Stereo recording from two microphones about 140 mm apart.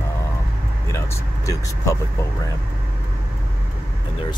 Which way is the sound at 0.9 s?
25° left (ahead or behind).